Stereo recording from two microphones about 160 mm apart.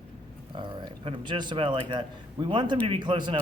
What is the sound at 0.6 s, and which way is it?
A man's voice, 30° right (ahead or behind).